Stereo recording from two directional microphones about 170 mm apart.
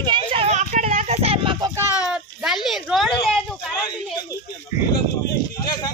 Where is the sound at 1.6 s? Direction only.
15° right (ahead or behind).